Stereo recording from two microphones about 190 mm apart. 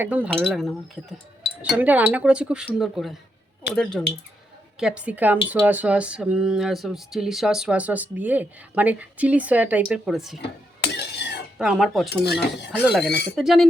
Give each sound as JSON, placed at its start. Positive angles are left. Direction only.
{"t": 0.0, "sound": "speech", "side_deg": -10}
{"t": 1.8, "sound": "speech", "side_deg": -10}
{"t": 10.9, "sound": "a sound", "side_deg": 60}
{"t": 11.5, "sound": "speech", "side_deg": -5}
{"t": 12.0, "sound": "speech", "side_deg": 60}
{"t": 12.7, "sound": "speech", "side_deg": -5}
{"t": 13.1, "sound": "speech", "side_deg": 60}
{"t": 13.3, "sound": "speech", "side_deg": 0}